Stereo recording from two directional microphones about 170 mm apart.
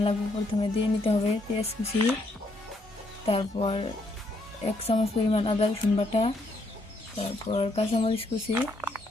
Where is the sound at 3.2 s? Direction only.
35° left (ahead or behind).